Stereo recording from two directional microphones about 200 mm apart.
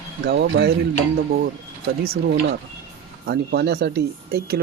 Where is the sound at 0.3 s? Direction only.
60° right (ahead or behind).